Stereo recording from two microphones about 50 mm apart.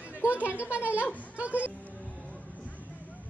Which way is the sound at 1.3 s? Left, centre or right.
Right.